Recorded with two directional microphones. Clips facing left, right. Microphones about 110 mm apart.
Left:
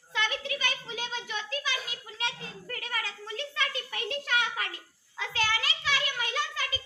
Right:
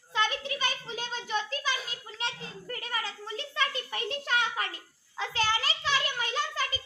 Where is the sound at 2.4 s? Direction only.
25° right (ahead or behind).